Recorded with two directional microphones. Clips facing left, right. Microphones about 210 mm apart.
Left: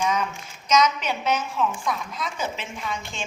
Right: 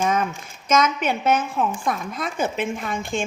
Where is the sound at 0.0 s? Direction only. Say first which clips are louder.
Right 3 dB; 50° right (ahead or behind).